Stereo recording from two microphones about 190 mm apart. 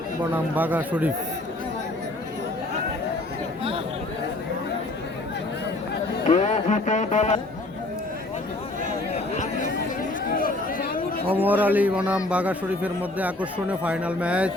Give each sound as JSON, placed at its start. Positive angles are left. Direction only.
{"t": 0.3, "sound": "a man's voice", "side_deg": -10}
{"t": 6.2, "sound": "speech", "side_deg": 35}
{"t": 9.1, "sound": "a sound", "side_deg": 35}
{"t": 10.2, "sound": "chatter", "side_deg": 50}
{"t": 11.3, "sound": "a man's voice", "side_deg": -10}